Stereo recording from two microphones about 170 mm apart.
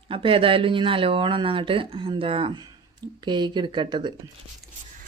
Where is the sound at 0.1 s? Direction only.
30° right (ahead or behind).